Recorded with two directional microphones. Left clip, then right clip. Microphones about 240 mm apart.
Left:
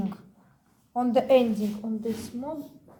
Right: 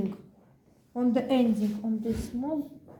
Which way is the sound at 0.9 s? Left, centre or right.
Left.